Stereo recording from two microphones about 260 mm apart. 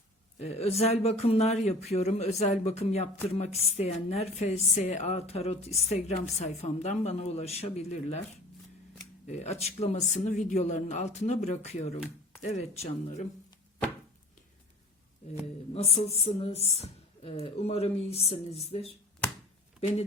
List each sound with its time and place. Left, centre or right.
0.3 s speech: left
9.2 s speech: left
15.7 s speech: left
19.2 s chopping: centre